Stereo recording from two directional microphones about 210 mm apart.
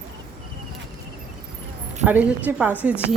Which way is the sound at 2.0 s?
10° right (ahead or behind).